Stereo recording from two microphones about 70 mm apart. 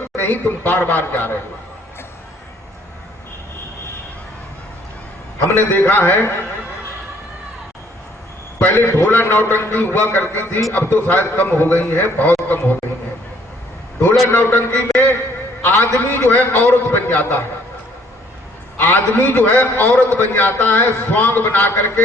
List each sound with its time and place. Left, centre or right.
0.2 s a man's voice: left
5.5 s a man's voice: left
8.5 s a man's voice: left
14.0 s a man's voice: left
18.8 s a man's voice: left